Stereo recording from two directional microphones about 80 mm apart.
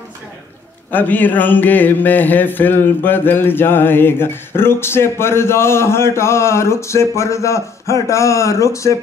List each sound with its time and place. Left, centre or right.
0.9 s mantra: left